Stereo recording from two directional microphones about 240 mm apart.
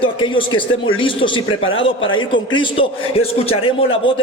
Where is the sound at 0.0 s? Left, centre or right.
Left.